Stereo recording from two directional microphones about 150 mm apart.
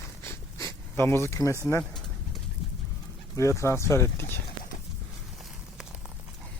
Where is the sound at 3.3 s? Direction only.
20° left (ahead or behind).